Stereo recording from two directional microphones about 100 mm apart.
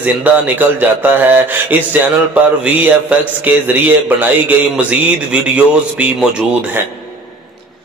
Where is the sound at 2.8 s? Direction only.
15° right (ahead or behind).